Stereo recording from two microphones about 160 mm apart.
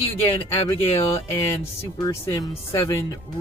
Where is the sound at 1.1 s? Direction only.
20° left (ahead or behind).